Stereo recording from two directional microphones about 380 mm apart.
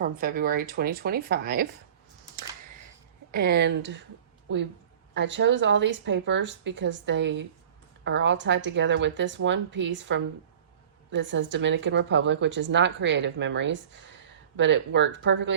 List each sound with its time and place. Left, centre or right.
0.0 s speech: right
3.3 s a woman's voice: right